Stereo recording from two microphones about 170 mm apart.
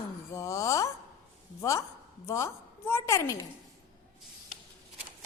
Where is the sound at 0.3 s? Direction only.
20° left (ahead or behind).